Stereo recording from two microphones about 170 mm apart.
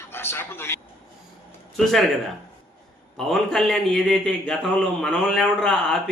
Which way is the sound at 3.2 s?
Centre (ahead or behind).